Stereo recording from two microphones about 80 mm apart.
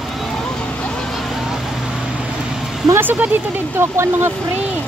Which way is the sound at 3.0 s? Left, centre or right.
Right.